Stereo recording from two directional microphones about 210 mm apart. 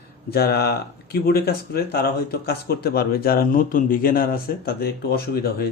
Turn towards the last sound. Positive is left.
turn(degrees=45)  # may be behind; listen again after turning